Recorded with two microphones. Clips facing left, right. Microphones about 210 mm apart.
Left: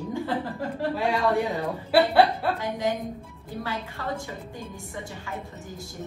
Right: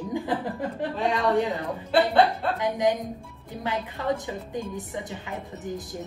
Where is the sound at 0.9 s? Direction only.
10° left (ahead or behind).